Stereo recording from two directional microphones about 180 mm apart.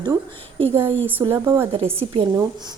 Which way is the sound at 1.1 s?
15° right (ahead or behind).